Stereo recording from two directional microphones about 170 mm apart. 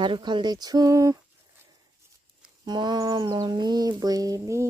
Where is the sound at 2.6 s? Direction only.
25° right (ahead or behind).